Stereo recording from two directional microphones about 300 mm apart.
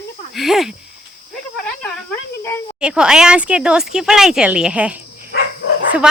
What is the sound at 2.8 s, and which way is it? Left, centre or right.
Speech, centre.